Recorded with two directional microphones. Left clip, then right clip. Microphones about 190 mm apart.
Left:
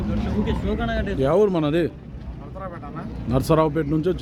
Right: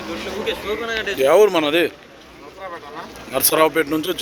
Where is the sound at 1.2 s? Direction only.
5° right (ahead or behind).